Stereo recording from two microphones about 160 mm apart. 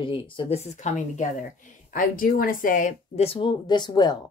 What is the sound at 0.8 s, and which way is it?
Speech, 45° left (ahead or behind).